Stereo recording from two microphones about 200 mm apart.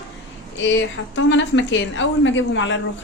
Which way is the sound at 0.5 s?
65° left (ahead or behind).